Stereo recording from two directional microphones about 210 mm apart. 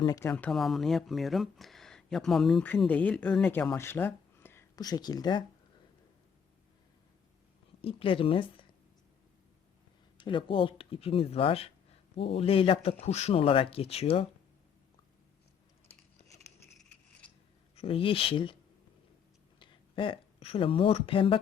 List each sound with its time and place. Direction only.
0.0 s speech: 20° left (ahead or behind)
0.3 s speech: 5° left (ahead or behind)
7.8 s speech: 25° left (ahead or behind)
10.2 s speech: 25° left (ahead or behind)
16.7 s scissors: 5° left (ahead or behind)
17.7 s speech: 25° left (ahead or behind)
19.5 s speech: 25° left (ahead or behind)